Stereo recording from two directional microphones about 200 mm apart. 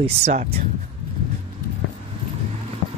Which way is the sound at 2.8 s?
35° left (ahead or behind).